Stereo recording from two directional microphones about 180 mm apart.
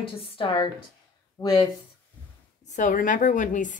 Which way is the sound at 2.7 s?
45° left (ahead or behind).